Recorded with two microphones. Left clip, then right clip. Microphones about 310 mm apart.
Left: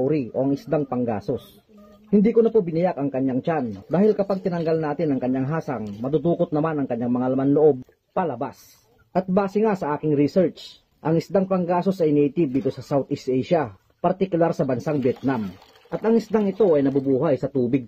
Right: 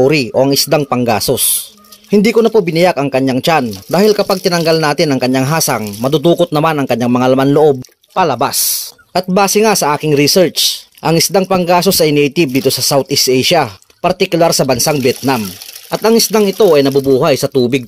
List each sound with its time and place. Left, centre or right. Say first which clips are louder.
0.0 s speech: right 12 dB; right